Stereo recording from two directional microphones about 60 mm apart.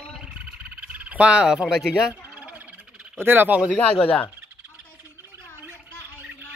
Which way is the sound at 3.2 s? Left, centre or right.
Right.